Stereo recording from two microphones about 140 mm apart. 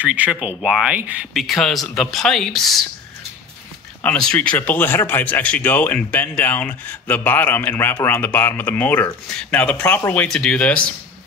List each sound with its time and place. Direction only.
0.0 s speech: 10° right (ahead or behind)
4.0 s speech: 10° left (ahead or behind)